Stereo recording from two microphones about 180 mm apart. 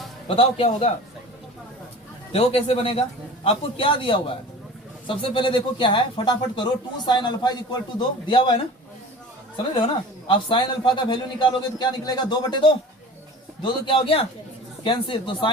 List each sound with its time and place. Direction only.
0.3 s a man's voice: 30° left (ahead or behind)
2.3 s a man's voice: 30° left (ahead or behind)
9.8 s speech: 30° left (ahead or behind)